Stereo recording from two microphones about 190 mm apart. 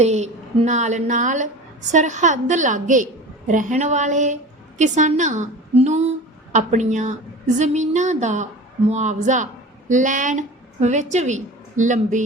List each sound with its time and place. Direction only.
0.0 s a woman's voice: 35° right (ahead or behind)